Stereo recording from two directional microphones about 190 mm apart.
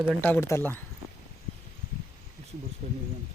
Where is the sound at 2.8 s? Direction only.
35° right (ahead or behind).